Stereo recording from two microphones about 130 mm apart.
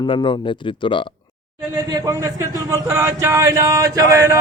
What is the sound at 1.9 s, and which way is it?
A man's voice, 25° right (ahead or behind).